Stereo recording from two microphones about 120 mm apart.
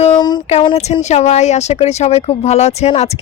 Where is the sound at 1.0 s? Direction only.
70° left (ahead or behind).